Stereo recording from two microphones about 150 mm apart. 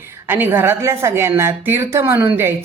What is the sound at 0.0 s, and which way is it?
A woman's voice, 15° right (ahead or behind).